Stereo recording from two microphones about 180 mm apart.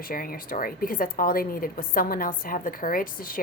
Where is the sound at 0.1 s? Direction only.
50° left (ahead or behind).